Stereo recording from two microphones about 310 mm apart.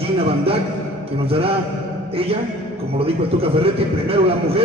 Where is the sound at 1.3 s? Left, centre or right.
Centre.